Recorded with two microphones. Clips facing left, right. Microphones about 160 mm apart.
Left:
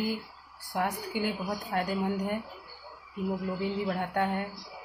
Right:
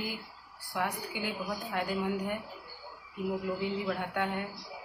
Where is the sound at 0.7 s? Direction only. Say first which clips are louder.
Left 3 dB; 40° left (ahead or behind).